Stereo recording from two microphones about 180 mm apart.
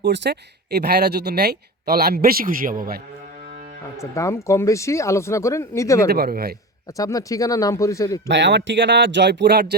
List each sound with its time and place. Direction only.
0.0 s speech: 75° right (ahead or behind); by 3.0 s 55° right (ahead or behind)
4.0 s speech: 15° left (ahead or behind)
6.1 s speech: 55° right (ahead or behind)
6.9 s speech: 20° left (ahead or behind)
8.3 s speech: 80° right